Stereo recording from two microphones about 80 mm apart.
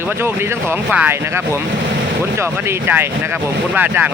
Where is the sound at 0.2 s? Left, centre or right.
Right.